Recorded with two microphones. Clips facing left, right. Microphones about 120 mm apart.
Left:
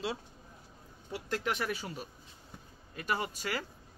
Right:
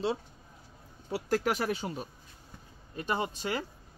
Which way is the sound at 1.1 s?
40° right (ahead or behind).